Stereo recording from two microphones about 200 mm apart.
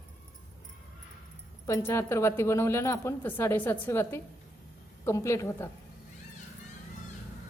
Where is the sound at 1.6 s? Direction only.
15° left (ahead or behind).